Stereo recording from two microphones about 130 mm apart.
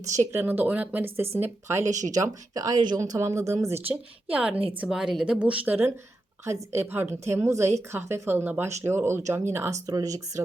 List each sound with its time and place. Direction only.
0.1 s speech: 20° right (ahead or behind)
1.8 s speech: 70° right (ahead or behind)
2.1 s speech: 25° right (ahead or behind)
4.3 s speech: 10° right (ahead or behind); by 10.4 s 25° right (ahead or behind)